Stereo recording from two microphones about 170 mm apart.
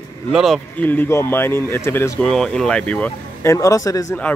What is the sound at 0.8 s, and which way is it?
Speech, 10° left (ahead or behind).